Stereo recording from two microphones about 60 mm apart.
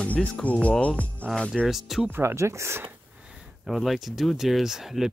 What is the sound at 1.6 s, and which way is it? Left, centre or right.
Speech, centre.